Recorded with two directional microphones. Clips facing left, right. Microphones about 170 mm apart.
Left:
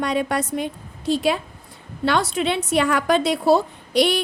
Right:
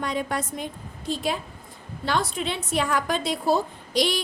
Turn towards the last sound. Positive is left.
turn(degrees=60)  # may be behind; listen again after turning